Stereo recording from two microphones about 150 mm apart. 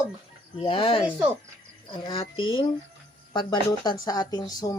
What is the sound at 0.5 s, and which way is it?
Speech, 40° left (ahead or behind).